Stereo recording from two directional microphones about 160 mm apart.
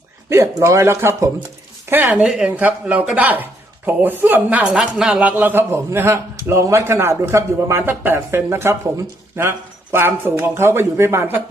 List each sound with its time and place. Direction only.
0.3 s a man's voice: 15° right (ahead or behind)